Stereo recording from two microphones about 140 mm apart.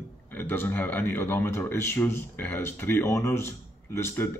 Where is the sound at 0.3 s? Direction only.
15° left (ahead or behind).